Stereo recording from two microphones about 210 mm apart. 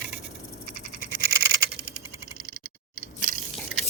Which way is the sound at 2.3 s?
50° right (ahead or behind).